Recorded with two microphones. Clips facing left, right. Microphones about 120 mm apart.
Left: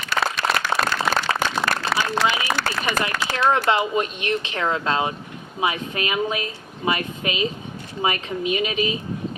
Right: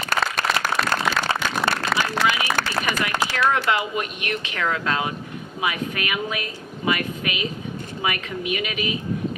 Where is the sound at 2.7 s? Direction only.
45° left (ahead or behind).